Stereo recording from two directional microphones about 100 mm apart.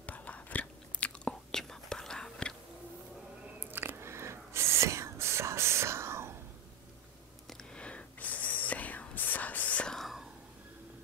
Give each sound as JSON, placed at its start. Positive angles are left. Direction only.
{"t": 0.0, "sound": "chewing", "side_deg": 15}
{"t": 3.5, "sound": "whispering", "side_deg": -20}
{"t": 7.4, "sound": "whispering", "side_deg": 10}